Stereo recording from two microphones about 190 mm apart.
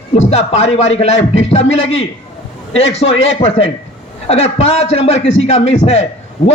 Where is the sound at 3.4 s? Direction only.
35° left (ahead or behind).